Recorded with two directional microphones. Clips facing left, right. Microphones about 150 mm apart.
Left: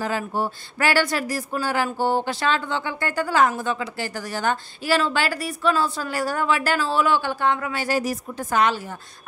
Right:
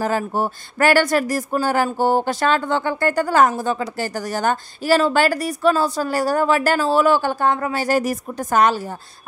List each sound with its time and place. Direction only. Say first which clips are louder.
0.0 s a woman's voice: right 4 dB; 45° right (ahead or behind)